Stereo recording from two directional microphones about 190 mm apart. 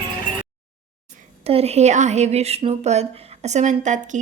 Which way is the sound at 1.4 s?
30° right (ahead or behind).